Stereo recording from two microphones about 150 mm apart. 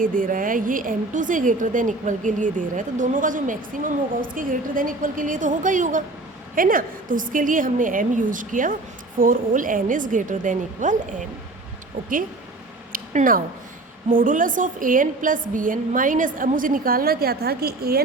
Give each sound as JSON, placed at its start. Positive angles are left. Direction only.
{"t": 0.0, "sound": "a woman's voice", "side_deg": -65}
{"t": 6.6, "sound": "a woman's voice", "side_deg": -70}
{"t": 12.9, "sound": "a sound", "side_deg": -70}
{"t": 14.1, "sound": "a woman's voice", "side_deg": -65}